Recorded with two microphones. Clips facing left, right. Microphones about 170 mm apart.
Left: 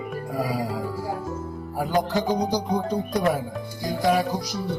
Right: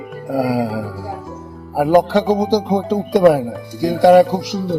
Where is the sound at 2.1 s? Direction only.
90° right.